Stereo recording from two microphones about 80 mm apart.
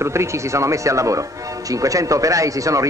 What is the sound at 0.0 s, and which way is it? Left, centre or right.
Speech, right.